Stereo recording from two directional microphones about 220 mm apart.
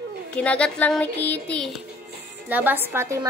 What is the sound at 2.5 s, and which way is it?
Speech, 10° right (ahead or behind).